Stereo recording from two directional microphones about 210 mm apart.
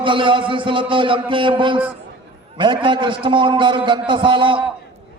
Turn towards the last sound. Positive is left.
turn(degrees=-25)  # may be behind; listen again after turning